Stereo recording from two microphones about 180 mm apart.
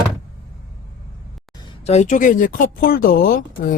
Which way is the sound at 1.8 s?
40° left (ahead or behind).